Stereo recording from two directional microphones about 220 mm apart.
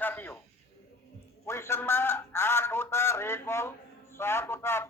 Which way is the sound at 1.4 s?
10° left (ahead or behind).